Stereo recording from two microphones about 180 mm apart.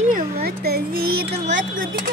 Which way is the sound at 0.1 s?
60° right (ahead or behind).